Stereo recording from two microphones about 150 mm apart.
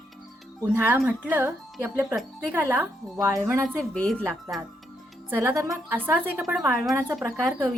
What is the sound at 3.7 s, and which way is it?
Speech, 5° left (ahead or behind).